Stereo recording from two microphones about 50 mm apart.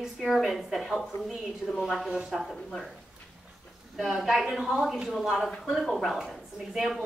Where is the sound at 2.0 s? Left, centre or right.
Centre.